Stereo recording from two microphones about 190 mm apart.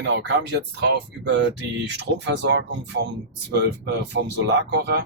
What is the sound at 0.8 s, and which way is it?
Speech, 65° right (ahead or behind).